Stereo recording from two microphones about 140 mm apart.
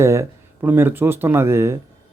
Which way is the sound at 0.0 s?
20° right (ahead or behind).